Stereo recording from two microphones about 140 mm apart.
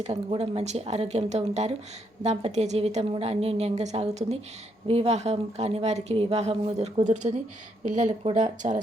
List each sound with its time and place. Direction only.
0.0 s a woman's voice: 50° right (ahead or behind)